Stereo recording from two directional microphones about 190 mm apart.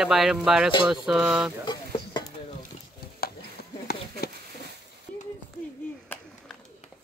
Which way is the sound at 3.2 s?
55° left (ahead or behind).